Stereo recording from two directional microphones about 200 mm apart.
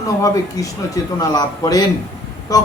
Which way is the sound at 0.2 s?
15° left (ahead or behind).